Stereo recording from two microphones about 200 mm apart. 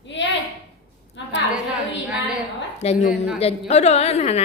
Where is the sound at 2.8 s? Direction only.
35° left (ahead or behind).